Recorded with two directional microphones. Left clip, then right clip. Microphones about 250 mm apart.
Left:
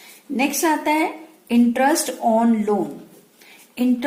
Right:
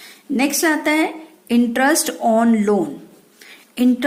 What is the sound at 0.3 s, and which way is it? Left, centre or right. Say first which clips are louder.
A woman's voice: right 2 dB; right.